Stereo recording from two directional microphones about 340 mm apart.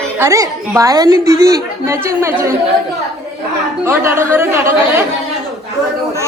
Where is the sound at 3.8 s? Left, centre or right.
Centre.